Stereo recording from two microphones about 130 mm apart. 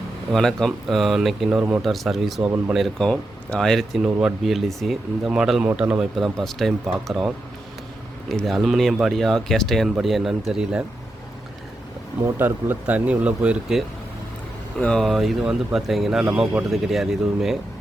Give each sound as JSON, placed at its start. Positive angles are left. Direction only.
{"t": 0.3, "sound": "speech", "side_deg": 5}
{"t": 8.3, "sound": "speech", "side_deg": 0}
{"t": 12.2, "sound": "speech", "side_deg": -15}
{"t": 14.8, "sound": "speech", "side_deg": 5}